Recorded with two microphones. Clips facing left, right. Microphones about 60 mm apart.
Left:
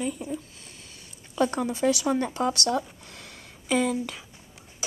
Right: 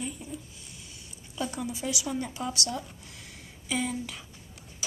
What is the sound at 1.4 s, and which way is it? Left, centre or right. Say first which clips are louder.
Speech: left 9 dB; left.